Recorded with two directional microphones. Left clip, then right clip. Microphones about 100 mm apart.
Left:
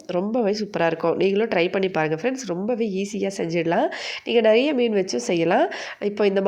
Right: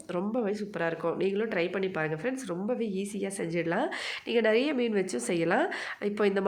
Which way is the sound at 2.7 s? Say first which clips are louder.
Left 7 dB; 45° left (ahead or behind).